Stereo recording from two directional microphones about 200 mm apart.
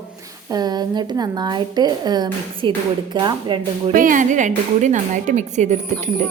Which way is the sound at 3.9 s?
40° right (ahead or behind).